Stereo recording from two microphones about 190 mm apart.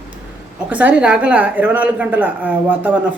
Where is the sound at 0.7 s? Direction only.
10° right (ahead or behind).